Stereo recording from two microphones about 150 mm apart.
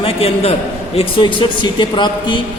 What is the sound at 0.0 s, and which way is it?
A man's voice, 40° left (ahead or behind).